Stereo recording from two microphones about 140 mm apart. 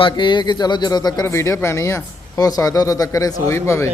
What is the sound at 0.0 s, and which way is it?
Speech, 35° left (ahead or behind).